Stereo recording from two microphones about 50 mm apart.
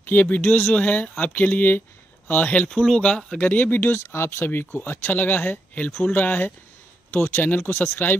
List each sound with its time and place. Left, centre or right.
0.0 s speech: left
0.7 s speech: left
2.7 s speech: centre
3.0 s speech: centre
3.3 s speech: left
4.0 s speech: left
5.0 s speech: left
5.9 s speech: centre
6.1 s speech: left
7.1 s speech: left